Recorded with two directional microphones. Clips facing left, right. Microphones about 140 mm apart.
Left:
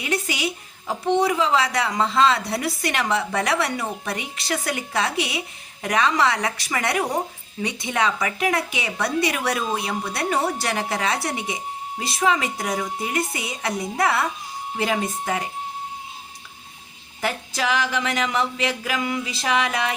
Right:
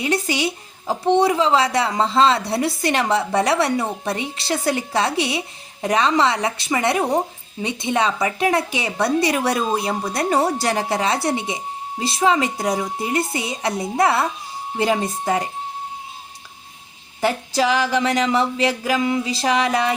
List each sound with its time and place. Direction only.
0.0 s a woman's voice: 35° right (ahead or behind)
17.2 s a woman's voice: 30° right (ahead or behind)